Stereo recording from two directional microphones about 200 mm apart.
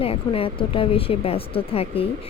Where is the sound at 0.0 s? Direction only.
30° left (ahead or behind).